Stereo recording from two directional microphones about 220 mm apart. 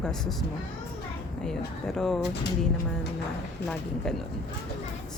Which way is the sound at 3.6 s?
Centre (ahead or behind).